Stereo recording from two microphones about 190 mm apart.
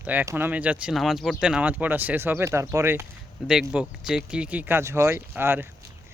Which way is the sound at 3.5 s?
Centre (ahead or behind).